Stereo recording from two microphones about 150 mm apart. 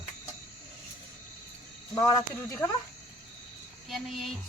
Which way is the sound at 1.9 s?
20° left (ahead or behind).